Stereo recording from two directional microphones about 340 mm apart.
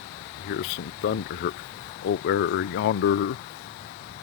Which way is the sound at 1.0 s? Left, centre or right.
Left.